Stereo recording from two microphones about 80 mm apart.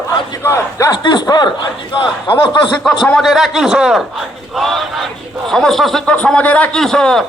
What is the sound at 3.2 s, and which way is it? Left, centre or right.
Speech, centre.